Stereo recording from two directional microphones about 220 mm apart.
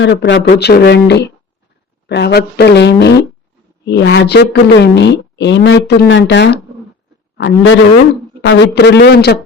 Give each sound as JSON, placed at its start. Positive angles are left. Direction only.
{"t": 0.0, "sound": "a man's voice", "side_deg": 55}